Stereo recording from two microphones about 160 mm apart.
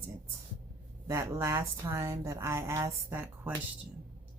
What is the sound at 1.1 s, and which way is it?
Speech, 15° right (ahead or behind).